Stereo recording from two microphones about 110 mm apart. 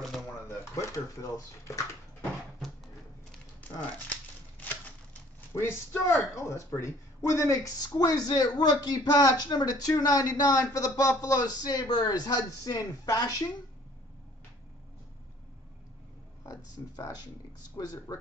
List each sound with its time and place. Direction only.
0.5 s speech: 30° left (ahead or behind)
3.6 s crumpling: 15° left (ahead or behind)
5.5 s speech: 25° left (ahead or behind)
16.4 s speech: 35° left (ahead or behind)